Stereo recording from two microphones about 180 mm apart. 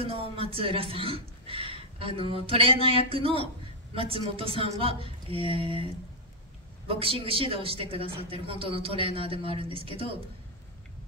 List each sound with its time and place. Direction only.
0.0 s a woman's voice: 30° right (ahead or behind)
6.9 s a woman's voice: 30° right (ahead or behind)